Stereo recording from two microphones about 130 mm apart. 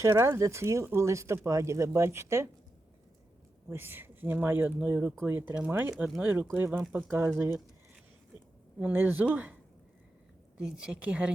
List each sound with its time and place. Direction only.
0.0 s speech: 20° right (ahead or behind)
3.7 s speech: 15° right (ahead or behind)
8.8 s speech: 15° right (ahead or behind)
10.6 s speech: 5° right (ahead or behind)